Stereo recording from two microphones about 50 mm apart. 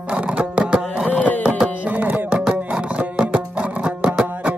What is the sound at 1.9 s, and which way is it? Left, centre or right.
Music, right.